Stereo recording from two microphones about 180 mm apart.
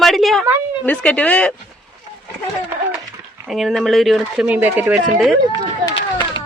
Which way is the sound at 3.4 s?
Centre (ahead or behind).